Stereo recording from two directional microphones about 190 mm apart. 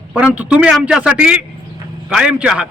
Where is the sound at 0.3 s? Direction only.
5° right (ahead or behind).